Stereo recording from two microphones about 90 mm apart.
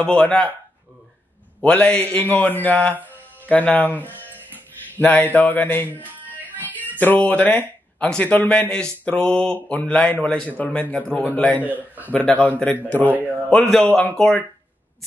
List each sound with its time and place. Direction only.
0.0 s speech: 10° left (ahead or behind)
1.6 s speech: 15° left (ahead or behind)
3.1 s music: 15° left (ahead or behind)
4.9 s speech: 20° left (ahead or behind)
6.0 s music: 20° right (ahead or behind)
6.6 s music: 20° left (ahead or behind)
7.0 s speech: 20° left (ahead or behind)
11.6 s a man's voice: 20° right (ahead or behind)
12.1 s speech: 15° left (ahead or behind)
13.5 s speech: 5° left (ahead or behind)